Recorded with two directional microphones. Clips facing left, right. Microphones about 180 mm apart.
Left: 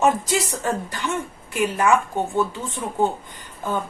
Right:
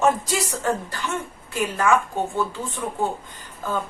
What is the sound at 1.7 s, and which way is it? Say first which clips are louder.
Speech: even; 20° left (ahead or behind).